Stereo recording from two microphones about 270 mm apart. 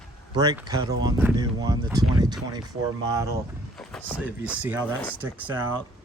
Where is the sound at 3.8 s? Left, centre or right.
Centre.